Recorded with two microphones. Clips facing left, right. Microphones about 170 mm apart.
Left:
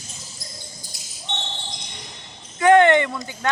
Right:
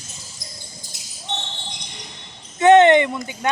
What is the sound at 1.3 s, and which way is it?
Basketball bounce, 40° right (ahead or behind).